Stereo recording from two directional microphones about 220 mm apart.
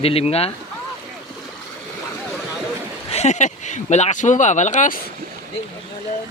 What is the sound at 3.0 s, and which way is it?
Speech, 30° left (ahead or behind).